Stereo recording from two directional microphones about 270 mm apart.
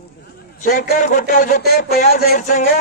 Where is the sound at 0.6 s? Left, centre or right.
Left.